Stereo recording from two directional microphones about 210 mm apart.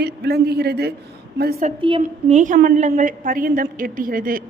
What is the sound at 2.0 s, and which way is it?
A woman's voice, 35° right (ahead or behind).